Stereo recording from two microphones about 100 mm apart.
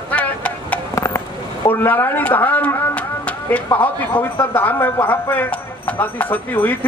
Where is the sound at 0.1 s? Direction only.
15° left (ahead or behind).